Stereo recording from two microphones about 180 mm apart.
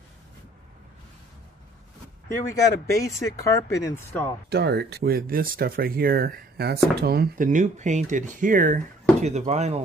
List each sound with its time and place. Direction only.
3.0 s speech: 15° left (ahead or behind)
4.5 s speech: 65° right (ahead or behind); by 9.8 s 40° right (ahead or behind)